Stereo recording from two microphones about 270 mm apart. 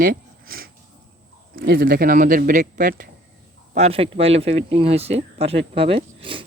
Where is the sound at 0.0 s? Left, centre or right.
Right.